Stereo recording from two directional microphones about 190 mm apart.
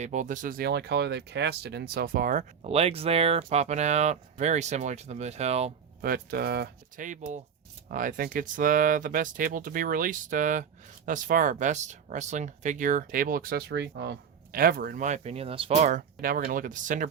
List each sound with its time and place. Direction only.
0.0 s speech: 40° right (ahead or behind)
6.0 s speech: 50° right (ahead or behind)
7.0 s speech: 40° right (ahead or behind)